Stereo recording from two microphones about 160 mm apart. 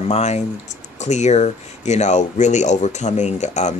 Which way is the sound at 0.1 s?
45° left (ahead or behind).